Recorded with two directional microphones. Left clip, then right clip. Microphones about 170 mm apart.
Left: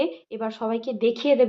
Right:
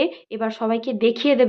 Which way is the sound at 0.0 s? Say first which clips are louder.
Right 4 dB; 20° right (ahead or behind).